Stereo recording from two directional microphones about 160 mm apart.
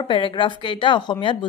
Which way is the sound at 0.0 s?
30° left (ahead or behind).